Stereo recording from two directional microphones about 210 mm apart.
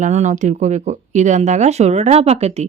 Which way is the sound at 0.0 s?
35° right (ahead or behind).